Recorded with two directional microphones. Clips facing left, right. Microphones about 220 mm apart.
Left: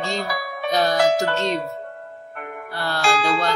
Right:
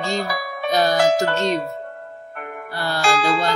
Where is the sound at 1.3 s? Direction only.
45° right (ahead or behind).